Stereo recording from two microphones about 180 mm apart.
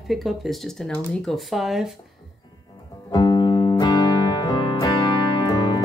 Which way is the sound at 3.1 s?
25° left (ahead or behind).